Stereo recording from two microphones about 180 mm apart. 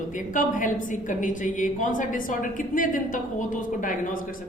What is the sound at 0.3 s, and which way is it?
A woman's voice, 45° left (ahead or behind).